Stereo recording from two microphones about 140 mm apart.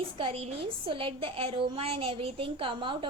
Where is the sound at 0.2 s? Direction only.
45° right (ahead or behind).